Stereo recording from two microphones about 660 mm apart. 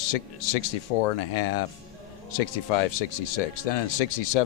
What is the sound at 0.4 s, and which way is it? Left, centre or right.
Speech, left.